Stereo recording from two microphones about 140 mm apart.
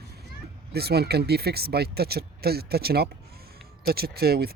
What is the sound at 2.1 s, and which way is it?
Speech, 90° right.